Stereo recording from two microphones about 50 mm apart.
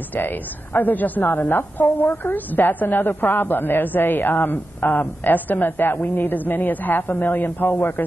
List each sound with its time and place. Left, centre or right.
0.1 s a woman's voice: left